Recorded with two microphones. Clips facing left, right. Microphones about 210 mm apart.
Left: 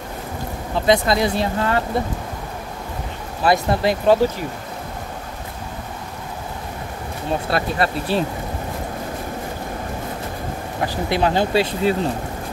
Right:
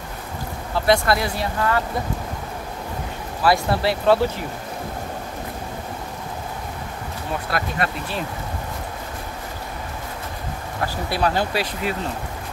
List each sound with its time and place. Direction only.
0.7 s speech: 20° left (ahead or behind)
3.4 s speech: 20° left (ahead or behind)
7.4 s speech: 30° left (ahead or behind)
10.8 s speech: 20° left (ahead or behind)